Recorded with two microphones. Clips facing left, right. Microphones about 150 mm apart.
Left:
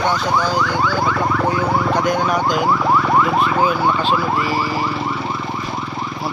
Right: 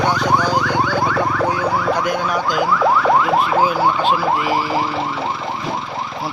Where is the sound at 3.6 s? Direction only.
15° right (ahead or behind).